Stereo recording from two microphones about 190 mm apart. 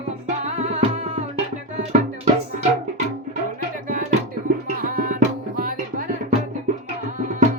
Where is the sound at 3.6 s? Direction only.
45° right (ahead or behind).